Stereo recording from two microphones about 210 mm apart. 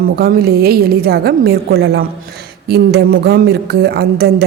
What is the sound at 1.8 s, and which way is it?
Speech, 65° right (ahead or behind).